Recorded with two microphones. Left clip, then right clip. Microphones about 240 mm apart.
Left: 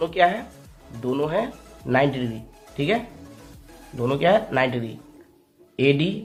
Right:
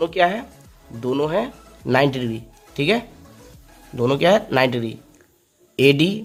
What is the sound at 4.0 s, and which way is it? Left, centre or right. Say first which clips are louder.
Speech: right 3 dB; right.